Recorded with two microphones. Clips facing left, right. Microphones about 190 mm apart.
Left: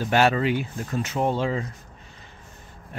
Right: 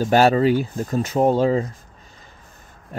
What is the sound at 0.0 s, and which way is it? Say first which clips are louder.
Speech: right 5 dB; 40° right (ahead or behind).